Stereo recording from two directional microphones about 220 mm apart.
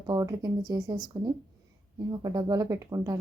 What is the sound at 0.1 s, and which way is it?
Speech, 15° right (ahead or behind).